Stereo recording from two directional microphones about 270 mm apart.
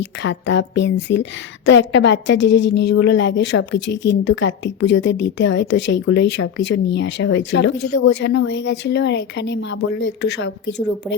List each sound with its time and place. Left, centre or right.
0.0 s a woman's voice: left